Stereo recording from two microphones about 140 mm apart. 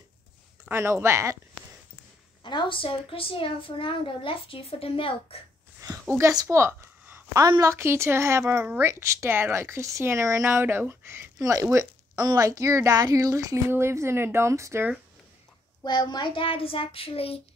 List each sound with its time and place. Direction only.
0.7 s speech: 15° right (ahead or behind)
2.4 s a woman's voice: 35° left (ahead or behind)
5.8 s a sound: 20° right (ahead or behind)
7.4 s speech: 25° right (ahead or behind)
15.8 s a woman's voice: 30° left (ahead or behind)